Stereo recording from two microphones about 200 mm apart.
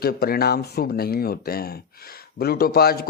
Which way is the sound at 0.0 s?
50° left (ahead or behind).